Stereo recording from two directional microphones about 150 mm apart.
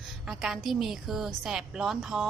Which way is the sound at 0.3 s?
Centre (ahead or behind).